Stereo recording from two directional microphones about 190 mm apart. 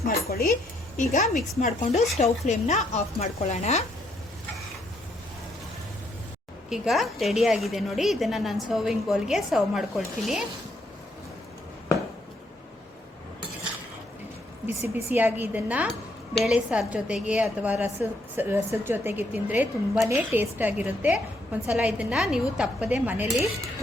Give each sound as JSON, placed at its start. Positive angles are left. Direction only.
{"t": 0.3, "sound": "speech", "side_deg": 55}
{"t": 0.9, "sound": "speech", "side_deg": 40}
{"t": 6.7, "sound": "a woman's voice", "side_deg": 0}
{"t": 15.1, "sound": "a woman's voice", "side_deg": -10}